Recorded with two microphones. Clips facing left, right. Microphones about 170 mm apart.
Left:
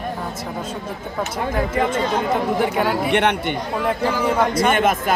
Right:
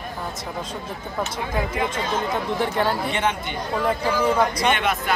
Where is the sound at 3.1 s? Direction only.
65° left (ahead or behind).